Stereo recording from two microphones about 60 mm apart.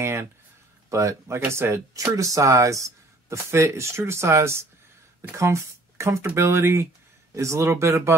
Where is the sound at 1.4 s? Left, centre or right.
Right.